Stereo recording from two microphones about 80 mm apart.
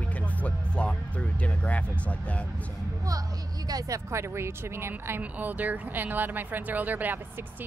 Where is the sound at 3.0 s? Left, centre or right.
Right.